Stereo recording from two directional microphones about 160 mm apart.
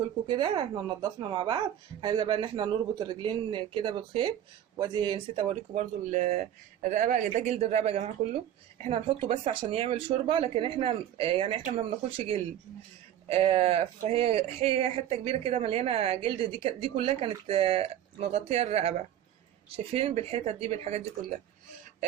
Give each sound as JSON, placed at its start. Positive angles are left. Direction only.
{"t": 0.3, "sound": "speech", "side_deg": -30}
{"t": 5.7, "sound": "speech", "side_deg": -50}